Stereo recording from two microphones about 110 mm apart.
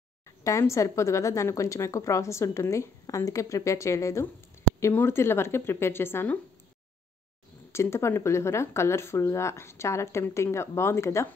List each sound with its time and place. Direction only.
0.4 s a woman's voice: 25° left (ahead or behind)
7.7 s a woman's voice: 25° left (ahead or behind)